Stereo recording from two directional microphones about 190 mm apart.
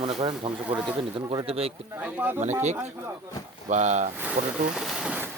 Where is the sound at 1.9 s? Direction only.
10° right (ahead or behind).